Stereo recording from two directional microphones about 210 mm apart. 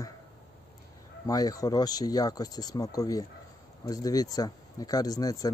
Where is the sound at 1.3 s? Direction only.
15° left (ahead or behind).